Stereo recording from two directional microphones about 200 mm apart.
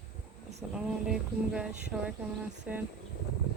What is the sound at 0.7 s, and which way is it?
Speech, 5° right (ahead or behind).